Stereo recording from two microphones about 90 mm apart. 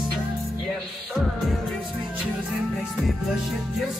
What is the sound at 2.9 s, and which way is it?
Music, centre (ahead or behind).